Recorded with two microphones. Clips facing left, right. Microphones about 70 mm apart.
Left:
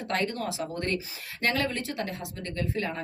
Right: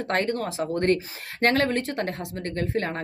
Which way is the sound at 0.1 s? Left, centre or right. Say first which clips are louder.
Right 3 dB; right.